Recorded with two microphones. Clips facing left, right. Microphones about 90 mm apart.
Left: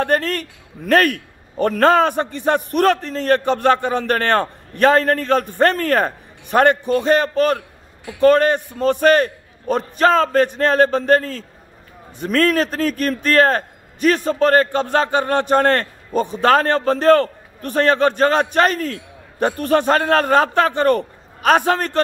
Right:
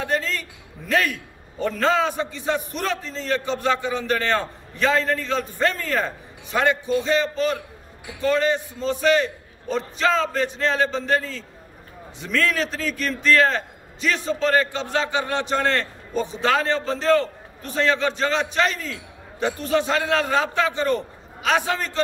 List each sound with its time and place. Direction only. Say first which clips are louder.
0.0 s a man's voice: left 6 dB; 55° left (ahead or behind)